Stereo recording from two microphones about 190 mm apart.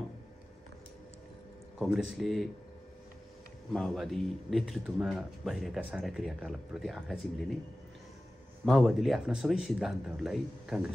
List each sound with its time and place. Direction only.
1.8 s a man's voice: centre (ahead or behind)
3.7 s a man's voice: centre (ahead or behind)
8.6 s a man's voice: centre (ahead or behind)